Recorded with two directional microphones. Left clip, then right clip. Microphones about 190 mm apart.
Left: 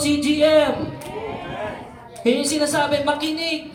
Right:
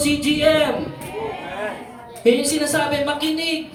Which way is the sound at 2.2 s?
25° left (ahead or behind).